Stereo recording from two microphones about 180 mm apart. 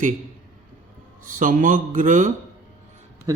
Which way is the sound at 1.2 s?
50° right (ahead or behind).